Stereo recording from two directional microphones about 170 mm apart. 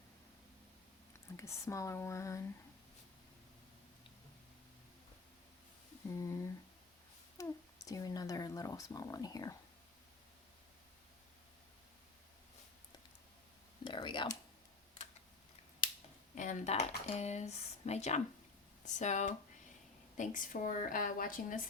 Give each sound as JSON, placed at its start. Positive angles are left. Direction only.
{"t": 1.4, "sound": "speech", "side_deg": 15}
{"t": 6.1, "sound": "speech", "side_deg": 15}
{"t": 13.8, "sound": "speech", "side_deg": 30}
{"t": 16.3, "sound": "a woman's voice", "side_deg": 45}